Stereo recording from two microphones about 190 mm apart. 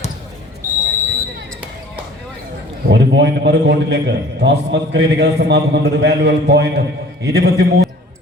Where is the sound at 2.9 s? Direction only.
65° right (ahead or behind).